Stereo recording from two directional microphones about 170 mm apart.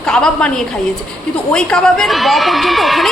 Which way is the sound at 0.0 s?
5° left (ahead or behind).